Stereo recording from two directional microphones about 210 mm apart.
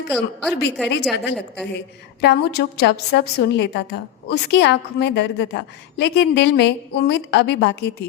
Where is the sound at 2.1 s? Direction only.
50° left (ahead or behind).